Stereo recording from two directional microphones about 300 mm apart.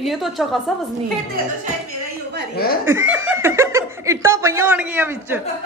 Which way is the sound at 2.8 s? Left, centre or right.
Centre.